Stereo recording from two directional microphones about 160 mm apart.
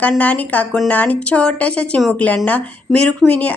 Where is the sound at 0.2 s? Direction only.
10° left (ahead or behind).